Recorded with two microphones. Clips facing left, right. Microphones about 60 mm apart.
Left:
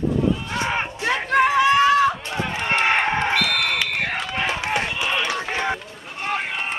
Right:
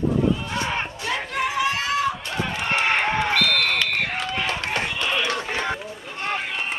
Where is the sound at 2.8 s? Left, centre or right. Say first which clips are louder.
Left 2 dB; left.